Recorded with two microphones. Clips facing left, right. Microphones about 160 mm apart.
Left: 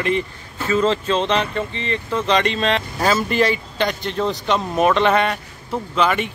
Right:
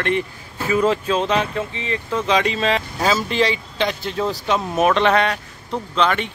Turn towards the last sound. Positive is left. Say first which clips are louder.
# left 1 dB
turn(degrees=5)  # may be behind; listen again after turning